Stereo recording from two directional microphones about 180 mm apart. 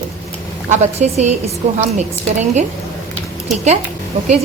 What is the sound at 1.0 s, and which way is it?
Speech, 40° right (ahead or behind).